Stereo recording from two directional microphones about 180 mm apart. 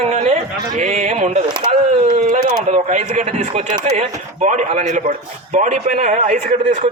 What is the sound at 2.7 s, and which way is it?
A man's voice, 45° right (ahead or behind).